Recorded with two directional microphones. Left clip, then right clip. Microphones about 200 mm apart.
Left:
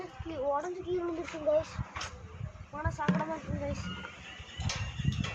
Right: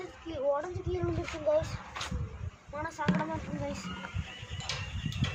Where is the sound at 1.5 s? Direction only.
20° right (ahead or behind).